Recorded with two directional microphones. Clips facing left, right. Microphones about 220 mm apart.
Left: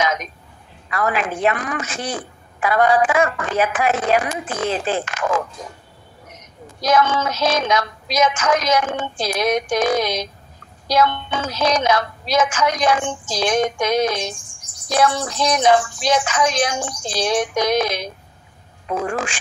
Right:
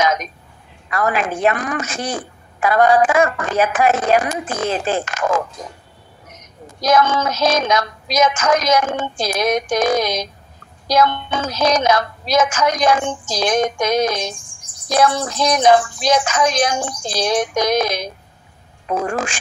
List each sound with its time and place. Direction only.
0.0 s a sound: 45° right (ahead or behind)
0.8 s a woman's voice: 45° right (ahead or behind)
6.8 s a woman's voice: 45° right (ahead or behind)